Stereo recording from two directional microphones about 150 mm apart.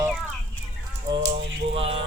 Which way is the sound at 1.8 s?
40° right (ahead or behind).